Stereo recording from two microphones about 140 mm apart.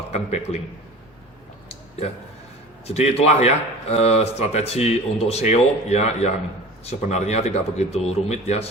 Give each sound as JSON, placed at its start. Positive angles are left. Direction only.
{"t": 0.1, "sound": "speech", "side_deg": 50}
{"t": 2.8, "sound": "speech", "side_deg": 45}